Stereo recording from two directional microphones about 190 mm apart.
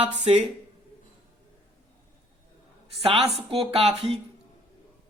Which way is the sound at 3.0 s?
30° right (ahead or behind).